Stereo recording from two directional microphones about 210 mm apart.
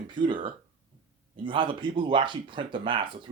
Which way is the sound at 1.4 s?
25° right (ahead or behind).